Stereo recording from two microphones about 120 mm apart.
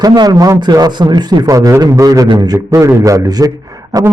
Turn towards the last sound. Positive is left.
turn(degrees=-30)  # may be behind; listen again after turning